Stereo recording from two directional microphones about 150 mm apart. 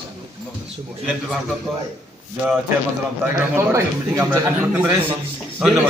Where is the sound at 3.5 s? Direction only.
20° right (ahead or behind).